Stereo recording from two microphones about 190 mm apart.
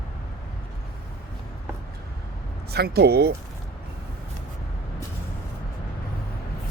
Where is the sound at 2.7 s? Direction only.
60° right (ahead or behind).